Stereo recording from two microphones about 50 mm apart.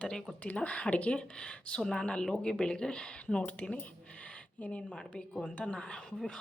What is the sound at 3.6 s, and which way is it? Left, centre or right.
Speech, left.